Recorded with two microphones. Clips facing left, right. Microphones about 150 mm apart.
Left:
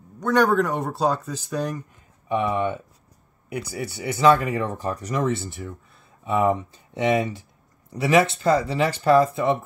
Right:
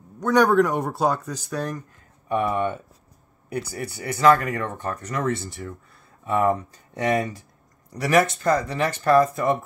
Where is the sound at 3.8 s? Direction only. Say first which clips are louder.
Even; 25° left (ahead or behind).